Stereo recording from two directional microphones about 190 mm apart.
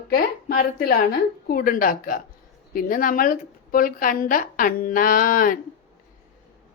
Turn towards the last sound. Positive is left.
turn(degrees=45)  # may be behind; listen again after turning